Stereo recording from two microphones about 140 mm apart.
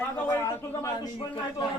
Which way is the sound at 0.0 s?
10° left (ahead or behind).